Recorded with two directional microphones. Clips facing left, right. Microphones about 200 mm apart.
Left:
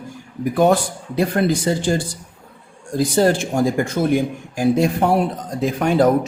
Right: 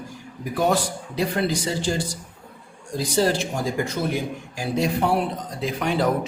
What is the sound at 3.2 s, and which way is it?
Speech, 50° left (ahead or behind).